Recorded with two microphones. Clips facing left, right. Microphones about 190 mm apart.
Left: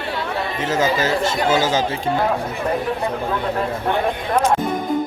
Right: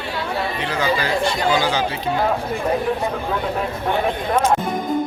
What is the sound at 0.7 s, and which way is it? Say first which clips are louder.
Chatter: left 3 dB; 45° left (ahead or behind).